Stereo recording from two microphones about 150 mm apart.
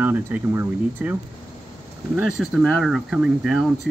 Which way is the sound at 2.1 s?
5° right (ahead or behind).